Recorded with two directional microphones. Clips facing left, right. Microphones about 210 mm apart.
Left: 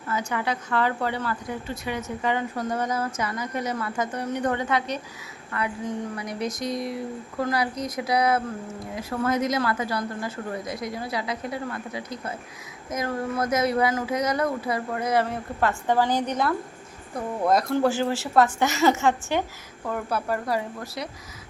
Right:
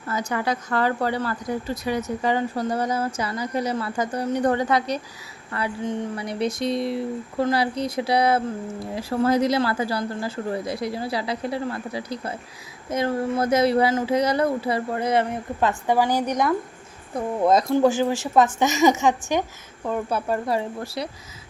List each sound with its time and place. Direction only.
0.1 s speech: 40° right (ahead or behind)